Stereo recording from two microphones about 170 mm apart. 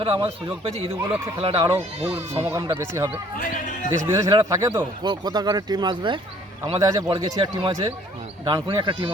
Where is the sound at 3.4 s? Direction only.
50° left (ahead or behind).